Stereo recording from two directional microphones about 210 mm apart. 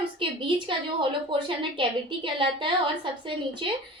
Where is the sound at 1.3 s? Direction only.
25° right (ahead or behind).